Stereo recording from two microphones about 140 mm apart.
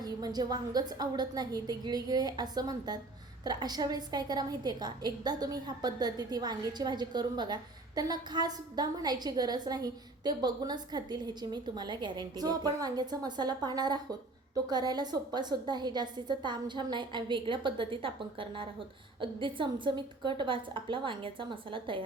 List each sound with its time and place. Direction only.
0.0 s a woman's voice: 30° right (ahead or behind)